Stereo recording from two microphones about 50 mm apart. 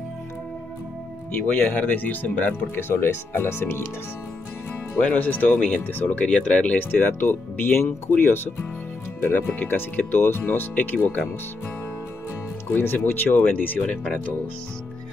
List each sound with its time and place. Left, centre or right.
1.3 s speech: left
2.9 s speech: left
5.0 s speech: left
6.8 s speech: left
12.7 s speech: left